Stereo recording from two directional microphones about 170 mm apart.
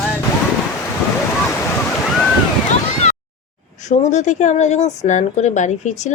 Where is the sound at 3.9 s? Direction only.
45° left (ahead or behind).